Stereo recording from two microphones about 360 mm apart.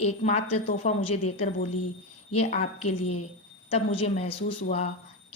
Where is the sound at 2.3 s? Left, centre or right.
Centre.